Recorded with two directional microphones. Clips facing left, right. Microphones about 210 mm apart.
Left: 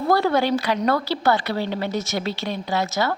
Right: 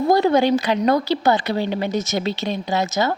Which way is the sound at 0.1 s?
20° right (ahead or behind).